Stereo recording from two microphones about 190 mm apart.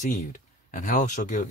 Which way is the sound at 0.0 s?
40° left (ahead or behind).